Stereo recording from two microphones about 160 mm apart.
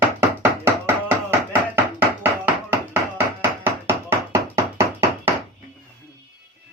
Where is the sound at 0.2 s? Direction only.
15° right (ahead or behind).